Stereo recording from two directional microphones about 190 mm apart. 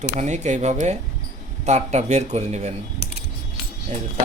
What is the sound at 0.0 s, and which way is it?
Speech, 40° right (ahead or behind).